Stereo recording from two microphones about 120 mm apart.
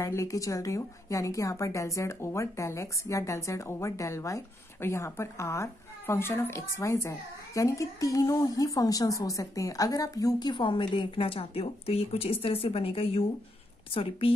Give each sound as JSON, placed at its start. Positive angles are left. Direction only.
{"t": 0.0, "sound": "a woman's voice", "side_deg": 25}